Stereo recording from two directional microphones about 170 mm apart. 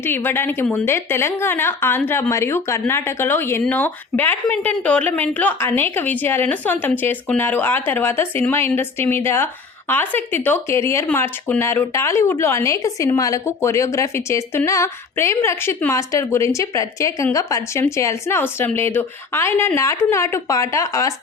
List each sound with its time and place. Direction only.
0.0 s a woman's voice: 10° left (ahead or behind)